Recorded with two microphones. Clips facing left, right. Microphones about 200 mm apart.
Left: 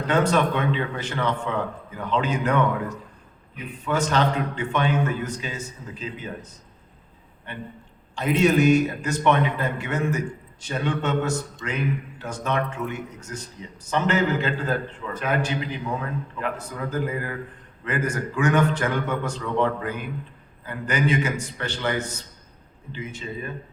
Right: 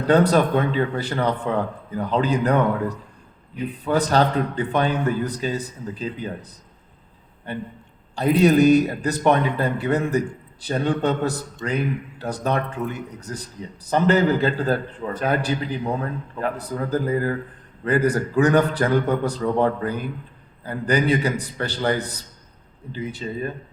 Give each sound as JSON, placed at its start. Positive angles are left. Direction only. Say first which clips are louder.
{"t": 0.1, "sound": "a man's voice", "louder": "right 5 dB", "side_deg": -35}